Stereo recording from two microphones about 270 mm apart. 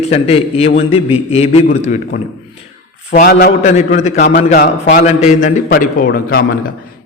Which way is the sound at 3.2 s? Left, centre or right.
Left.